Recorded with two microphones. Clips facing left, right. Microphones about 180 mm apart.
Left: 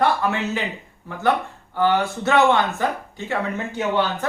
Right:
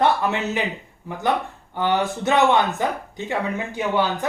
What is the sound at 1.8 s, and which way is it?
Speech, 15° right (ahead or behind).